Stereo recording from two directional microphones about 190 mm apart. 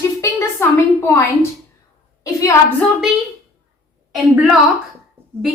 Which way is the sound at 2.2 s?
15° left (ahead or behind).